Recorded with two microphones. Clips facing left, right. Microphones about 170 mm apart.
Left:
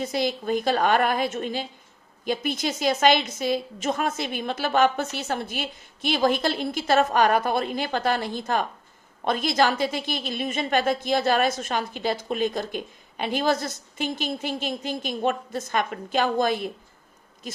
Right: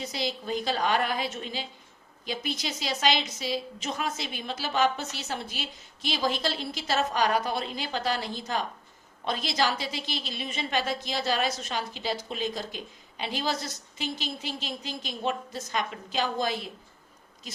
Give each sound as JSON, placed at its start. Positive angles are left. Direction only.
{"t": 0.0, "sound": "a woman's voice", "side_deg": 50}